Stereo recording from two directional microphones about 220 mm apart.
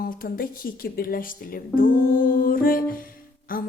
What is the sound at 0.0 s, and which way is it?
Speech, 40° left (ahead or behind).